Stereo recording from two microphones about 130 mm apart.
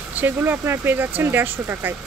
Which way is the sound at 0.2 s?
15° right (ahead or behind).